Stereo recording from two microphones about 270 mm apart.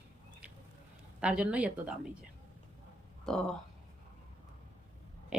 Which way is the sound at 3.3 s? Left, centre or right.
Centre.